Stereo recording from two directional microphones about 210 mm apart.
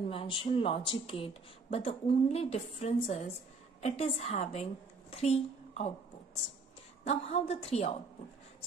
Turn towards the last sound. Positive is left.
turn(degrees=30)  # may be behind; listen again after turning